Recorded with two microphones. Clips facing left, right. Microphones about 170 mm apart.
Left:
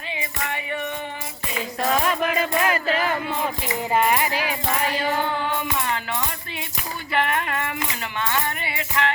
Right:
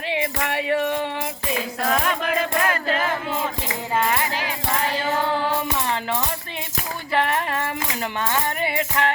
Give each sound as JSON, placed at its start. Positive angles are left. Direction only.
{"t": 0.1, "sound": "music", "side_deg": -90}
{"t": 1.9, "sound": "music", "side_deg": 5}
{"t": 5.4, "sound": "music", "side_deg": -35}
{"t": 7.1, "sound": "a sound", "side_deg": -35}
{"t": 8.3, "sound": "music", "side_deg": -45}